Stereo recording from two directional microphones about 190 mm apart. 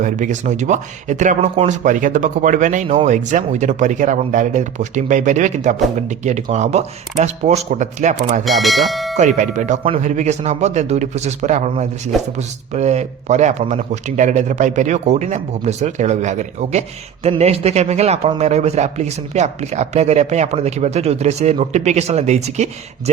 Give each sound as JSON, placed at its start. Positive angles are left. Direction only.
{"t": 0.0, "sound": "speech", "side_deg": -40}
{"t": 8.4, "sound": "speech", "side_deg": 0}
{"t": 9.1, "sound": "speech", "side_deg": -40}